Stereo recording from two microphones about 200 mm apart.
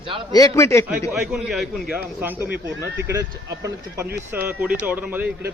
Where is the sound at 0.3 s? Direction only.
15° left (ahead or behind).